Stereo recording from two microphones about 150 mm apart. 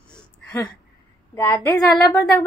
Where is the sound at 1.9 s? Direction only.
25° left (ahead or behind).